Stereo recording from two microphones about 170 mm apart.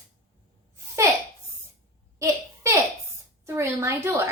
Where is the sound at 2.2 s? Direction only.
15° right (ahead or behind).